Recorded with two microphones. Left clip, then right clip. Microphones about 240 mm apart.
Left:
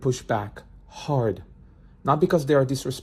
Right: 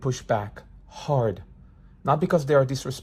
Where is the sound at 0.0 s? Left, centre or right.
Centre.